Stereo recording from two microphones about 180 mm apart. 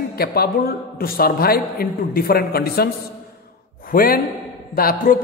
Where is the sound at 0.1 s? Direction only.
60° left (ahead or behind).